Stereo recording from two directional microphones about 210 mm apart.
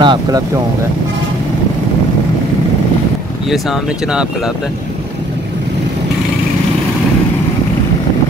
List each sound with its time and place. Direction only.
0.0 s speech: 20° right (ahead or behind)